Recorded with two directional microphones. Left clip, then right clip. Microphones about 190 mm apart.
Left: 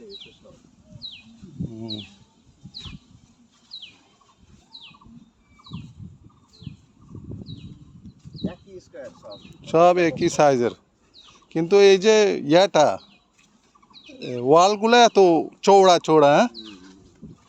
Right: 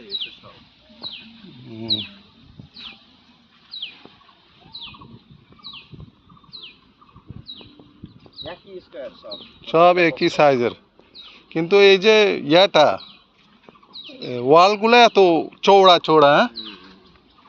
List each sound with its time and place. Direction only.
8.9 s speech: 55° left (ahead or behind)
9.6 s a man's voice: 35° left (ahead or behind)
14.3 s speech: 25° left (ahead or behind); by 16.7 s 45° left (ahead or behind)